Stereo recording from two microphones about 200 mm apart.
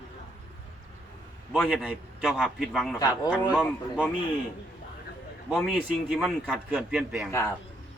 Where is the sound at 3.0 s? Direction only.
20° left (ahead or behind).